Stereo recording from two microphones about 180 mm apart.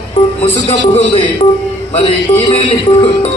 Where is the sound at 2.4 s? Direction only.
30° left (ahead or behind).